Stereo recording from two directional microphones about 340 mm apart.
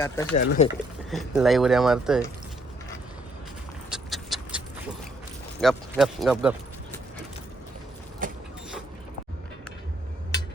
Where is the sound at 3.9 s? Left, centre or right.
Centre.